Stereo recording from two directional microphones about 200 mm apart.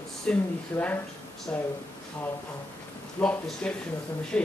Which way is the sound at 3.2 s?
5° left (ahead or behind).